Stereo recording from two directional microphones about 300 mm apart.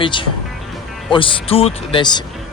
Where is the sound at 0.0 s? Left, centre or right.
Centre.